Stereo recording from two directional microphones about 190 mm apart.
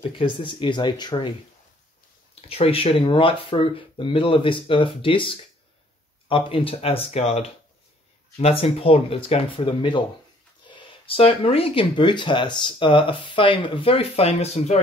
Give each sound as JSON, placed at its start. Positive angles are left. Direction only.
{"t": 0.0, "sound": "speech", "side_deg": 25}
{"t": 2.4, "sound": "speech", "side_deg": 30}